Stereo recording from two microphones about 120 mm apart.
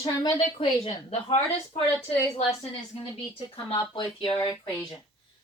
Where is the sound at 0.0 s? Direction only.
35° left (ahead or behind).